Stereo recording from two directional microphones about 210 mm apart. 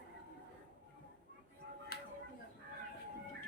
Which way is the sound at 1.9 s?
45° left (ahead or behind).